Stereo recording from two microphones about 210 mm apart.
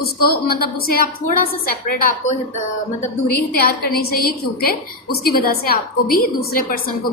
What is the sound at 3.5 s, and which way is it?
A woman's voice, 45° left (ahead or behind).